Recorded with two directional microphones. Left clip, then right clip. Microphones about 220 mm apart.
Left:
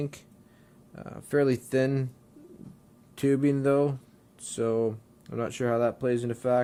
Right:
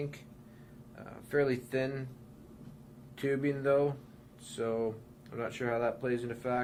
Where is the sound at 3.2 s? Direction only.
45° left (ahead or behind).